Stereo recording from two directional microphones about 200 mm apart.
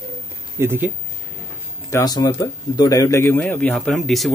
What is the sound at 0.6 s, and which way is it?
Speech, 10° right (ahead or behind).